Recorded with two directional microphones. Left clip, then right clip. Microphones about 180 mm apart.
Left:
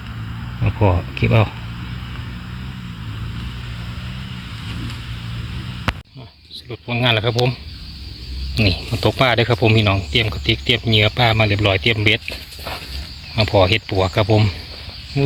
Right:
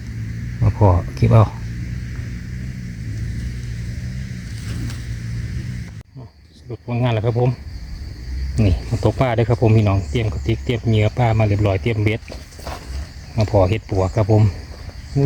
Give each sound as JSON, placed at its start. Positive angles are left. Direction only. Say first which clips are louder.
{"t": 0.6, "sound": "speech", "louder": "right 1 dB", "side_deg": -15}
{"t": 6.7, "sound": "speech", "louder": "left 5 dB", "side_deg": -5}
{"t": 8.5, "sound": "speech", "louder": "left 4 dB", "side_deg": -10}
{"t": 13.4, "sound": "speech", "louder": "left 3 dB", "side_deg": 0}